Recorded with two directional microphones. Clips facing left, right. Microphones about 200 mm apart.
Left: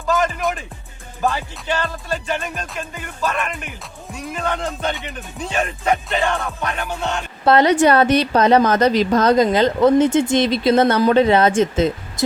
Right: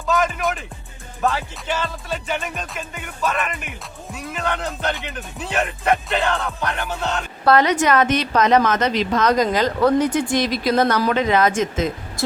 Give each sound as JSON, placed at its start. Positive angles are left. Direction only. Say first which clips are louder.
{"t": 0.0, "sound": "speech", "louder": "left 1 dB", "side_deg": 0}
{"t": 1.2, "sound": "music", "louder": "even", "side_deg": 0}
{"t": 7.4, "sound": "a woman's voice", "louder": "left 3 dB", "side_deg": 30}
{"t": 9.3, "sound": "speech", "louder": "left 4 dB", "side_deg": 25}